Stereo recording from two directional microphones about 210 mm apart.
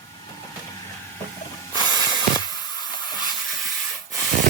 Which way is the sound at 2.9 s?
20° left (ahead or behind).